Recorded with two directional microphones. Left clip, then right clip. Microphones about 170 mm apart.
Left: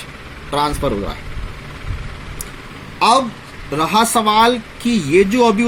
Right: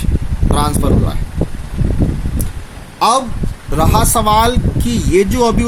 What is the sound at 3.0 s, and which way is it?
Speech, 15° right (ahead or behind).